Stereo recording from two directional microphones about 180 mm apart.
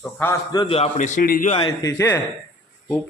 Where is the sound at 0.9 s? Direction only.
45° left (ahead or behind).